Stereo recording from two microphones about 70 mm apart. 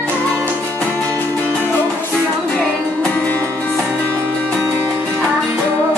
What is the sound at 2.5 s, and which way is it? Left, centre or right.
Music, centre.